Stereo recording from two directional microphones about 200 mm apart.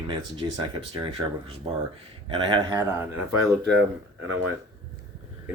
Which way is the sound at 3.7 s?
60° right (ahead or behind).